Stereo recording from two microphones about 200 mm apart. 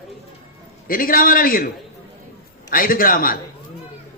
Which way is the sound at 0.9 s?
45° left (ahead or behind).